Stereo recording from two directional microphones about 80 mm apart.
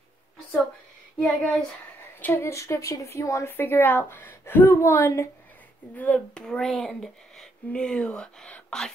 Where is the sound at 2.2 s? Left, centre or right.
Left.